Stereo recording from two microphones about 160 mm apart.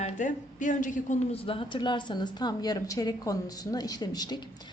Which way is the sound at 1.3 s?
35° left (ahead or behind).